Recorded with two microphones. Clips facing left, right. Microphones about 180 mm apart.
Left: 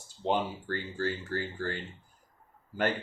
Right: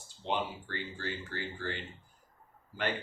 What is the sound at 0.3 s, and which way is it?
Speech, 45° left (ahead or behind).